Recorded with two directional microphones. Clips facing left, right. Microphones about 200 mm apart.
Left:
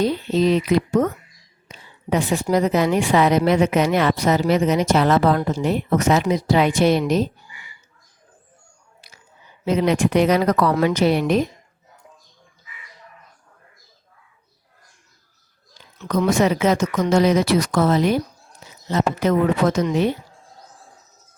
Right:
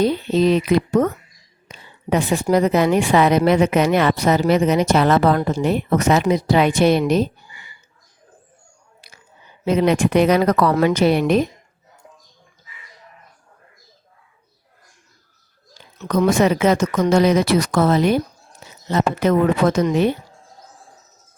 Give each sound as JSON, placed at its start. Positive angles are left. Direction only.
{"t": 0.0, "sound": "a woman's voice", "side_deg": -60}
{"t": 9.6, "sound": "a woman's voice", "side_deg": -60}
{"t": 16.0, "sound": "a woman's voice", "side_deg": -55}